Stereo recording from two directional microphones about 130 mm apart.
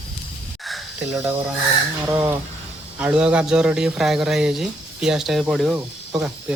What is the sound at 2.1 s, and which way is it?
Speech, 15° right (ahead or behind).